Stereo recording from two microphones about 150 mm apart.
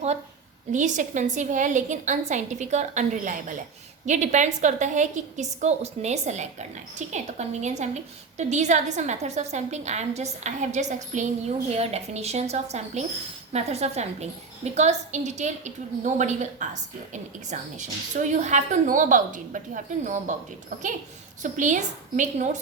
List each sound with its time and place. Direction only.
0.7 s a woman's voice: 55° right (ahead or behind)
21.4 s a woman's voice: 55° right (ahead or behind)